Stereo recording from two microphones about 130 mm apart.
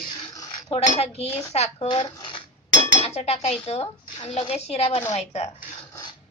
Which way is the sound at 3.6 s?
50° left (ahead or behind).